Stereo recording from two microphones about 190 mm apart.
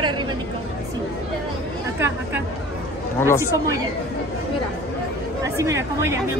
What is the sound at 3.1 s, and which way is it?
Speech, 15° left (ahead or behind).